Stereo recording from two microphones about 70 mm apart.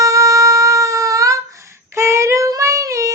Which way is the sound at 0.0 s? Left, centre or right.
Right.